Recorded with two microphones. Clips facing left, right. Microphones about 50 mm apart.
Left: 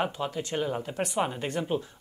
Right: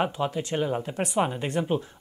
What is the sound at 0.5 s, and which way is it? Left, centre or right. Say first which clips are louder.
Speech: right 2 dB; centre.